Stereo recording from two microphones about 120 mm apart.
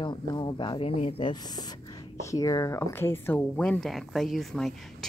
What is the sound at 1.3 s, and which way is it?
A woman's voice, 35° left (ahead or behind).